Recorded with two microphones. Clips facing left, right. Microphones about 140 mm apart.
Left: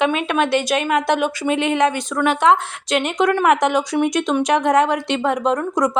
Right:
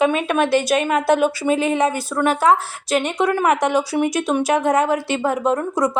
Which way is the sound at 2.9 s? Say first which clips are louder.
Left 1 dB; centre (ahead or behind).